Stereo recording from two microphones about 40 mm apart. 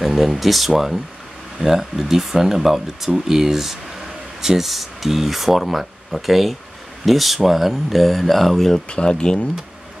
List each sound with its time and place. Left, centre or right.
0.0 s speech: centre
8.7 s speech: left